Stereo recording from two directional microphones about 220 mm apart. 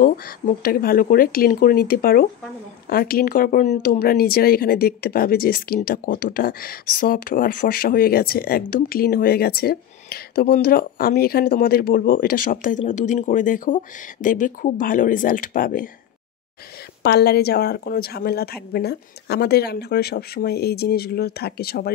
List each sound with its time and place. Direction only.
0.0 s speech: 40° left (ahead or behind)
17.0 s a woman's voice: 45° left (ahead or behind)